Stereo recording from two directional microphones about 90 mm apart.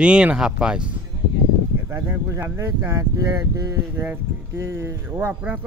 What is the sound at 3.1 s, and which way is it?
Speech, 40° right (ahead or behind).